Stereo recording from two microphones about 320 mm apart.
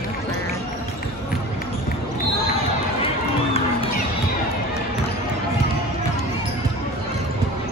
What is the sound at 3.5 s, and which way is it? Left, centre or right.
Crowd, centre.